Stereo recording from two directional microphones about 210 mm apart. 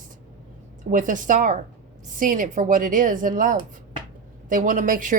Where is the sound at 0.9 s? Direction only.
40° right (ahead or behind).